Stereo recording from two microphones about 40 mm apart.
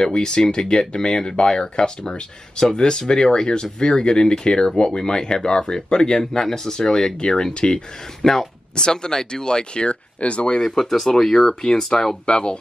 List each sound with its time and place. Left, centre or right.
0.0 s speech: left
8.2 s speech: centre
8.7 s speech: left
10.6 s speech: centre
12.3 s speech: left